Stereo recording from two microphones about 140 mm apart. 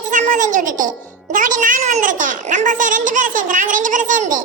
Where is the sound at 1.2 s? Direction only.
70° right (ahead or behind).